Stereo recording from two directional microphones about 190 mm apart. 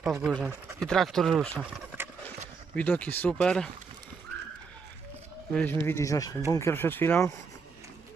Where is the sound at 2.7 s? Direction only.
10° left (ahead or behind).